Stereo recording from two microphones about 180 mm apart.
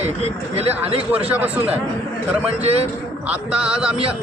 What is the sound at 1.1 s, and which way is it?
Speech, 5° right (ahead or behind).